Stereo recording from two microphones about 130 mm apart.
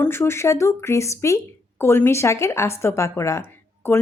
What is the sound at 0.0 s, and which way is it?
Speech, 20° left (ahead or behind).